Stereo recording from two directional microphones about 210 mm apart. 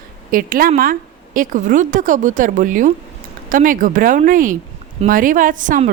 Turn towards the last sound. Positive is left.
turn(degrees=-40)  # may be behind; listen again after turning